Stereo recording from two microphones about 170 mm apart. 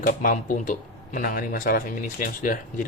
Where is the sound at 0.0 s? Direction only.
50° left (ahead or behind).